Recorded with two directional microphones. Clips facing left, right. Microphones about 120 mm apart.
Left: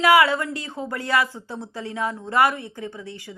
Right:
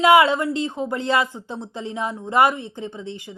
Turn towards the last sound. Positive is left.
turn(degrees=-20)  # may be behind; listen again after turning